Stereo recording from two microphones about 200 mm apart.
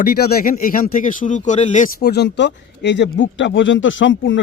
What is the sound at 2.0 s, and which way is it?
Speech, 55° left (ahead or behind).